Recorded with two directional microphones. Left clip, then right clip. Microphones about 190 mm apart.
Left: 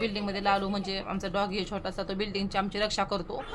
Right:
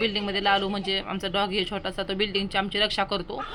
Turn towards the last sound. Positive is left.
turn(degrees=-10)  # may be behind; listen again after turning